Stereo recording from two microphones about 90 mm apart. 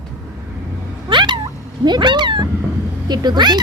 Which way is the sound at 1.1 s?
60° right (ahead or behind).